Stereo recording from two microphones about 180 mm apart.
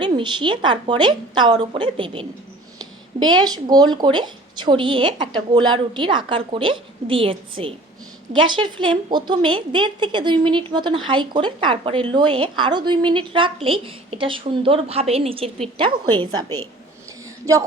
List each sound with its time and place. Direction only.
0.0 s a woman's voice: 25° right (ahead or behind)